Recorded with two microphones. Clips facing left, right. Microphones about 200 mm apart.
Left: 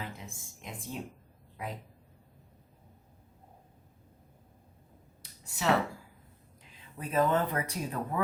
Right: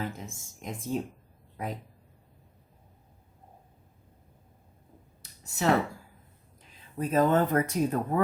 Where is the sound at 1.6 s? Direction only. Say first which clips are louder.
Right 4 dB; 45° right (ahead or behind).